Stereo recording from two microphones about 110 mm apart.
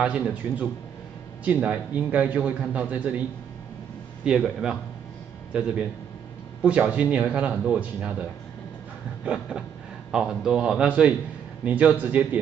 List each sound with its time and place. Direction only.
0.0 s a man's voice: 10° right (ahead or behind)
4.2 s a man's voice: 5° right (ahead or behind)